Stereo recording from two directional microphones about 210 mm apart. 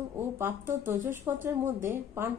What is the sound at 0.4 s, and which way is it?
A woman's voice, 10° right (ahead or behind).